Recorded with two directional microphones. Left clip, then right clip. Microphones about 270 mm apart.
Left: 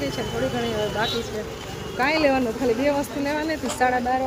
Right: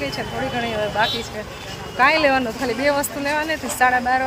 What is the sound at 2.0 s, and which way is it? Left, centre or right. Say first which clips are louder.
Speech: right 5 dB; centre.